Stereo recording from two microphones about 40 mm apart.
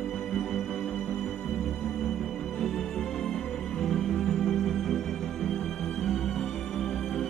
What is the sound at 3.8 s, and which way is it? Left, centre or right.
Music, centre.